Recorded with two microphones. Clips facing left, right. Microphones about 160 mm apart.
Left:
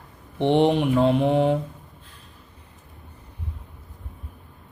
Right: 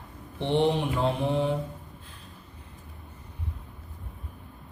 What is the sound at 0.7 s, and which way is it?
Mantra, 70° left (ahead or behind).